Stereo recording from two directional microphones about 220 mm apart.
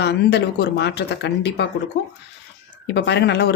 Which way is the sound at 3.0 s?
50° left (ahead or behind).